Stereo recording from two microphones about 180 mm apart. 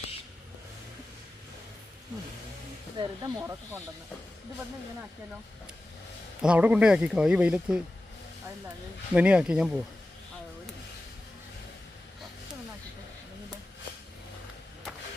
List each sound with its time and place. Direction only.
3.0 s speech: 20° right (ahead or behind)
6.4 s speech: 5° right (ahead or behind)
9.1 s speech: 5° right (ahead or behind)